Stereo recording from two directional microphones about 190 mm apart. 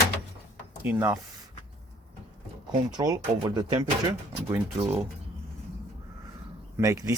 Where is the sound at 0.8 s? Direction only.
10° right (ahead or behind).